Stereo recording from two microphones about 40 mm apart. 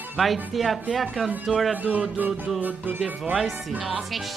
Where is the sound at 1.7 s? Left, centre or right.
Right.